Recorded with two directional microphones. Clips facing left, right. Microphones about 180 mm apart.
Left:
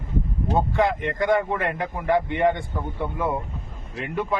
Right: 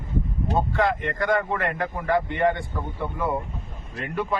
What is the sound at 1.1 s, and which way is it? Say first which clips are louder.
Speech: left 2 dB; 20° left (ahead or behind).